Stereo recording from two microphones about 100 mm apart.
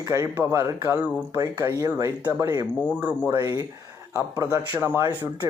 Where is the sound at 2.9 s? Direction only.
15° right (ahead or behind).